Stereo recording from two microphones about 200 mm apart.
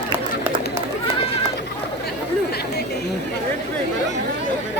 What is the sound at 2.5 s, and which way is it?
Chatter, 55° left (ahead or behind).